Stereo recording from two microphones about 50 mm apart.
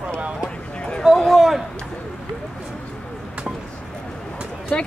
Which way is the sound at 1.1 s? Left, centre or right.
Centre.